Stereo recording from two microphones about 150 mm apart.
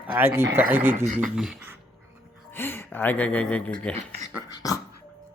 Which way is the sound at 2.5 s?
15° left (ahead or behind).